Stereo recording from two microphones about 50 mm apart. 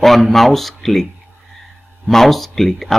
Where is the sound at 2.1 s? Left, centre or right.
Centre.